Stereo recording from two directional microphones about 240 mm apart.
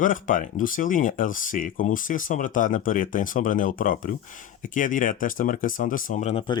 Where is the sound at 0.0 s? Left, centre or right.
Left.